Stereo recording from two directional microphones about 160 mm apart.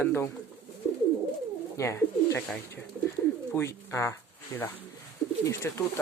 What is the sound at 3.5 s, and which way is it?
Speech, 15° left (ahead or behind).